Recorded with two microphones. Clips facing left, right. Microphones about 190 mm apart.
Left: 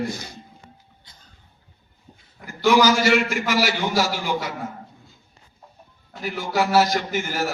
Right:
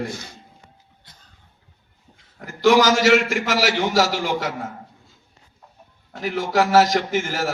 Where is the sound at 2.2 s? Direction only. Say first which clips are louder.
Right 3 dB; 90° right.